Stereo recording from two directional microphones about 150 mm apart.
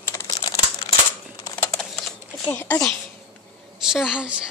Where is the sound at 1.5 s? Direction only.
15° left (ahead or behind).